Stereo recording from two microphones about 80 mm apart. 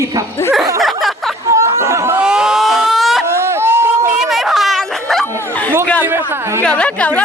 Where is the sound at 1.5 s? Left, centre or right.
Right.